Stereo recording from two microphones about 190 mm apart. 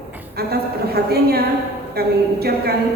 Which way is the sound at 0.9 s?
55° right (ahead or behind).